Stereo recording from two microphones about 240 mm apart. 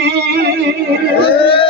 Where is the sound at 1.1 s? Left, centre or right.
Left.